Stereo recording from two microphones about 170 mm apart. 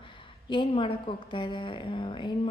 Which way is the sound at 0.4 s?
30° left (ahead or behind).